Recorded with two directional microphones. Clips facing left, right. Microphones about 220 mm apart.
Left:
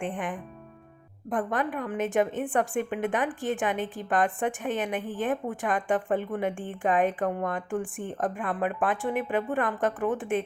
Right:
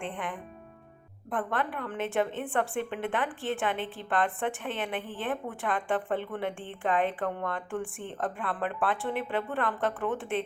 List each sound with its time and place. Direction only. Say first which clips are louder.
1.3 s speech: left 3 dB; 15° left (ahead or behind)
4.9 s a woman's voice: left 4 dB; 45° left (ahead or behind)
5.2 s speech: left 5 dB; 15° left (ahead or behind)